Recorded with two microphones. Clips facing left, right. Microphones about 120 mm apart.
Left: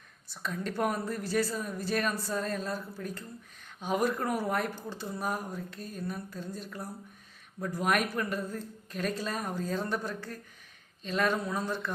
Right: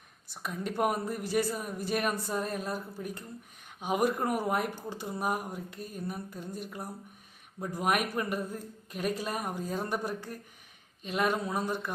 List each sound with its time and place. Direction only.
0.3 s speech: 15° right (ahead or behind)